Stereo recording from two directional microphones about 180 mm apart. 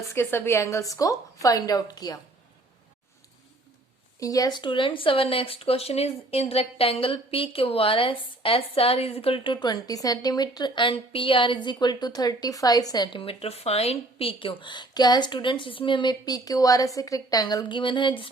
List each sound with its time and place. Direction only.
0.1 s a woman's voice: 15° left (ahead or behind)
4.2 s speech: 20° left (ahead or behind)